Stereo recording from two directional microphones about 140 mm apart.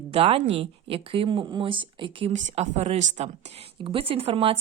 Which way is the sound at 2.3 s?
55° right (ahead or behind).